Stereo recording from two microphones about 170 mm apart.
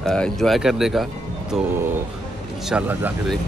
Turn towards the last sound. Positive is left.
turn(degrees=-10)  # may be behind; listen again after turning